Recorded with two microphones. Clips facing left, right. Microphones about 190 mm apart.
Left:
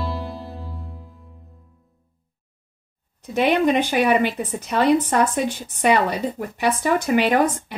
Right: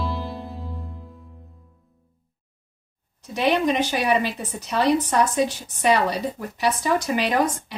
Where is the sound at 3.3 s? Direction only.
55° left (ahead or behind).